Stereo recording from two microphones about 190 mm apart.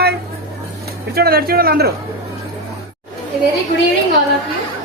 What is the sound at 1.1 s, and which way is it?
Speech, 55° right (ahead or behind).